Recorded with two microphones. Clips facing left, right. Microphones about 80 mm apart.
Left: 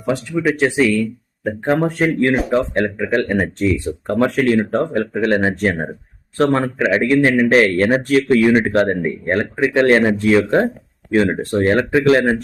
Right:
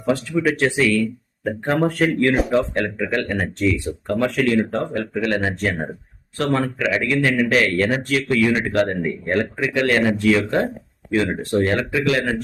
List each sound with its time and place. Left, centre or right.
0.0 s speech: centre
3.6 s a man's voice: left